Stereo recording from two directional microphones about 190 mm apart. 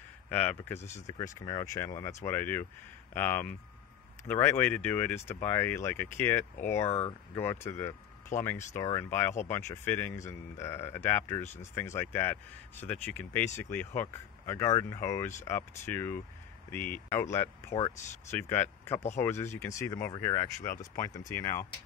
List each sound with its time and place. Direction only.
0.3 s speech: 10° left (ahead or behind)
0.7 s speech: 35° left (ahead or behind)
1.0 s speech: 20° left (ahead or behind)
6.9 s speech: 30° left (ahead or behind)
7.3 s speech: 15° left (ahead or behind)